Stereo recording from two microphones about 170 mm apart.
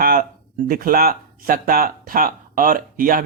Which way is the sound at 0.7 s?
55° right (ahead or behind).